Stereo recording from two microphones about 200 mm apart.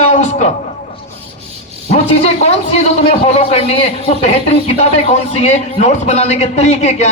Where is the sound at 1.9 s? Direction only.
30° left (ahead or behind).